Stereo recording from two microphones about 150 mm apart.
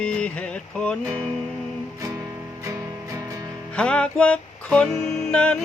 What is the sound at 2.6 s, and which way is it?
Music, 20° right (ahead or behind).